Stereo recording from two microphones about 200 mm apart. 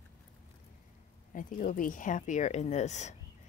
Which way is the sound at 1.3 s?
40° left (ahead or behind).